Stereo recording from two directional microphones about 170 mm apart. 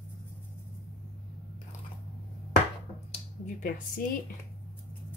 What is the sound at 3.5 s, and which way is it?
Speech, 50° left (ahead or behind).